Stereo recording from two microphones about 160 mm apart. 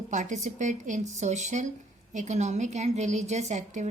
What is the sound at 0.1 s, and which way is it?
A woman's voice, 50° right (ahead or behind).